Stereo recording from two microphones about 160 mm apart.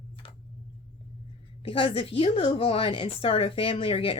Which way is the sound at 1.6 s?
35° left (ahead or behind).